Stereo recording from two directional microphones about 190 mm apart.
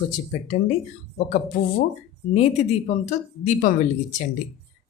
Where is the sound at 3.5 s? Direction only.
40° left (ahead or behind).